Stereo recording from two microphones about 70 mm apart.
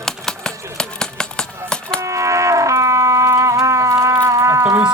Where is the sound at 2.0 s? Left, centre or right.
Right.